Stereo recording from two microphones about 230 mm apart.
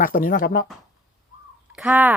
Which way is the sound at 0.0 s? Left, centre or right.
Left.